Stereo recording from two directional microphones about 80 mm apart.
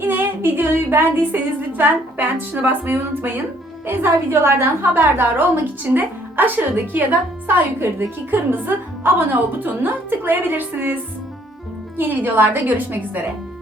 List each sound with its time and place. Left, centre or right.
0.0 s female singing: right
1.8 s a woman's voice: right
11.9 s a woman's voice: right